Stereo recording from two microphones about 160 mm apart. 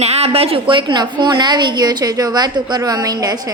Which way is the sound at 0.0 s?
40° right (ahead or behind).